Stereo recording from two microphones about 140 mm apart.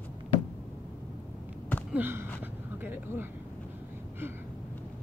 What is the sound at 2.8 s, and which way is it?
Speech, 15° right (ahead or behind).